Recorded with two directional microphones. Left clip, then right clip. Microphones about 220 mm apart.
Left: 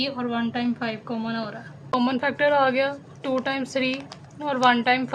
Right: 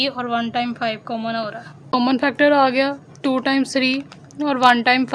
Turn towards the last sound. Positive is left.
turn(degrees=-45)  # may be behind; listen again after turning